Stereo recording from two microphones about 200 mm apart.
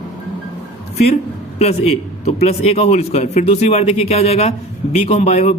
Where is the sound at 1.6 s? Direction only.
30° left (ahead or behind).